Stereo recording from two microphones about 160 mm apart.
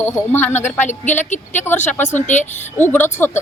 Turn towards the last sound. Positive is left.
turn(degrees=10)  # may be behind; listen again after turning